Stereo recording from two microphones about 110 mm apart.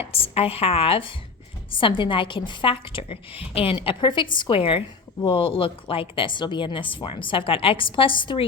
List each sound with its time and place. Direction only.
0.0 s a woman's voice: 60° left (ahead or behind)